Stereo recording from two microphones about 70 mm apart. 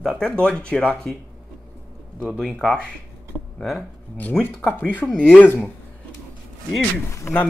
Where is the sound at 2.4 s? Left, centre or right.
Centre.